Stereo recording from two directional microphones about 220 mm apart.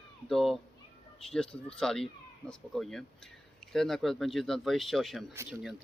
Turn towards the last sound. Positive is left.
turn(degrees=-10)  # may be behind; listen again after turning